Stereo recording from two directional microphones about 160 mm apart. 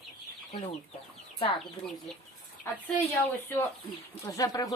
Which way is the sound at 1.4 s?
35° left (ahead or behind).